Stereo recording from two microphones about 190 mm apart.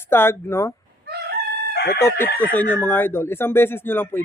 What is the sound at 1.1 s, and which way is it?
Chicken, 55° right (ahead or behind).